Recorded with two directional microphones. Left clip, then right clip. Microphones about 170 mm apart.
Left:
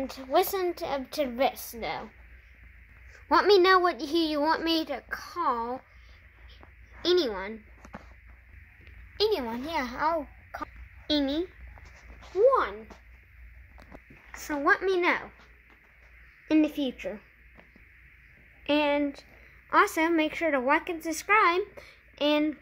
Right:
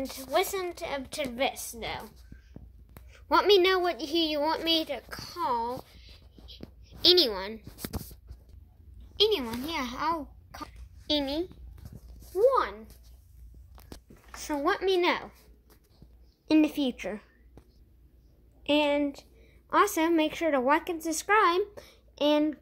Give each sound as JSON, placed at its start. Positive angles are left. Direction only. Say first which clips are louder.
{"t": 0.1, "sound": "a woman's voice", "louder": "left 3 dB", "side_deg": 30}
{"t": 3.1, "sound": "a woman's voice", "louder": "left 1 dB", "side_deg": 15}
{"t": 7.1, "sound": "a woman's voice", "louder": "right 3 dB", "side_deg": 0}
{"t": 9.4, "sound": "a woman's voice", "louder": "left 2 dB", "side_deg": 10}
{"t": 11.1, "sound": "a woman's voice", "louder": "left 1 dB", "side_deg": 5}
{"t": 14.3, "sound": "a child's voice", "louder": "left 4 dB", "side_deg": -10}
{"t": 16.4, "sound": "a child's voice", "louder": "right 1 dB", "side_deg": -15}
{"t": 18.6, "sound": "a woman's voice", "louder": "even", "side_deg": 0}